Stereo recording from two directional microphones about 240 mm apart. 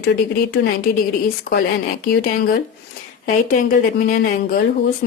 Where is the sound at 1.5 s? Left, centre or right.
Left.